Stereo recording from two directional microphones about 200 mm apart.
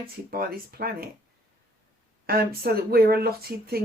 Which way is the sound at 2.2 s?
50° right (ahead or behind).